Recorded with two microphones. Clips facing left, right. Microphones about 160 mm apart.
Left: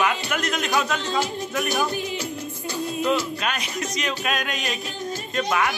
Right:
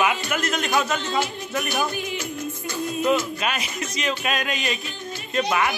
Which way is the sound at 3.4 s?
5° right (ahead or behind).